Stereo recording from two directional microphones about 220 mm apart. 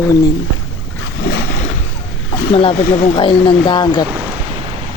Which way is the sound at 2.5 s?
25° left (ahead or behind).